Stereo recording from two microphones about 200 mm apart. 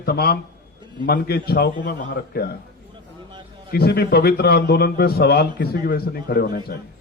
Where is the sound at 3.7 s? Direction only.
50° left (ahead or behind).